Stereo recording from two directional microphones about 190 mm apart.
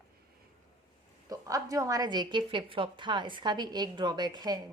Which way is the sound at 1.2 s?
15° right (ahead or behind).